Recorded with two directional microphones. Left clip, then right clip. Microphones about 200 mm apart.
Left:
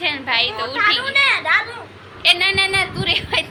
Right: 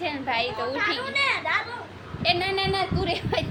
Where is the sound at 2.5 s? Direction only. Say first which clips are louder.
Left 7 dB; 30° right (ahead or behind).